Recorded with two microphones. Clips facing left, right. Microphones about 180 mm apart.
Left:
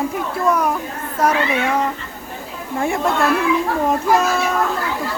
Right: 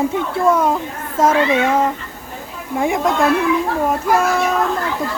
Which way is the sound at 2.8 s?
15° right (ahead or behind).